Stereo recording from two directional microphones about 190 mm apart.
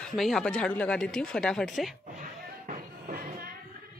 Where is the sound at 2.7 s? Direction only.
50° right (ahead or behind).